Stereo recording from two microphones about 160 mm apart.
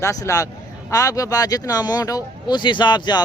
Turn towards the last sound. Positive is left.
turn(degrees=25)  # may be behind; listen again after turning